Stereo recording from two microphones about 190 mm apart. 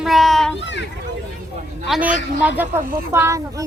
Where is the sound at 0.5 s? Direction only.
65° left (ahead or behind).